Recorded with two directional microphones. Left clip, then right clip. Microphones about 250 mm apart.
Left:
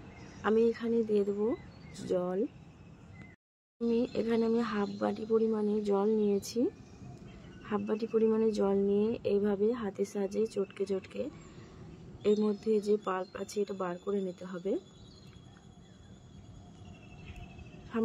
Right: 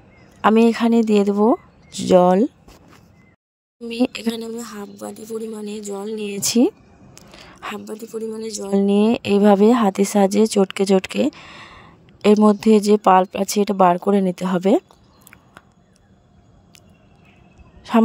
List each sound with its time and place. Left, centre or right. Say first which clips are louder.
0.4 s speech: right 13 dB; right
3.9 s speech: right 8 dB; right
4.4 s a woman's voice: even; centre
6.4 s speech: right 15 dB; right
7.7 s a woman's voice: left 2 dB; centre
8.7 s speech: right 12 dB; right